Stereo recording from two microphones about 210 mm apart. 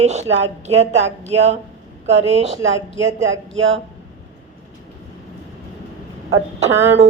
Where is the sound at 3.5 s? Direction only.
65° right (ahead or behind).